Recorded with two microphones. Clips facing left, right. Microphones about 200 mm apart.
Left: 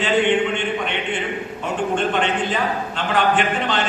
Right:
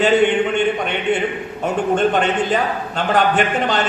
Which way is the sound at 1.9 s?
40° right (ahead or behind).